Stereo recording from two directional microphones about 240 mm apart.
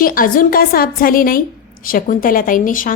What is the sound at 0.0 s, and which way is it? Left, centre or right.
A woman's voice, left.